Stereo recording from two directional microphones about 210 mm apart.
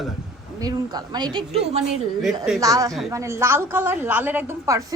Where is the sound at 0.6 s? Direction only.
20° right (ahead or behind).